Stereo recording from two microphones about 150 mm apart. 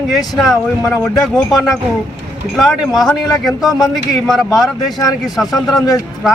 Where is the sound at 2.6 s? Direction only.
Centre (ahead or behind).